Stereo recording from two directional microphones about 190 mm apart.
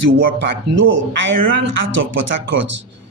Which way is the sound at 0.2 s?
60° right (ahead or behind).